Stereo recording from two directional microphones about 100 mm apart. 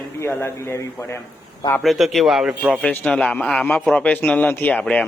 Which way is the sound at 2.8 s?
10° left (ahead or behind).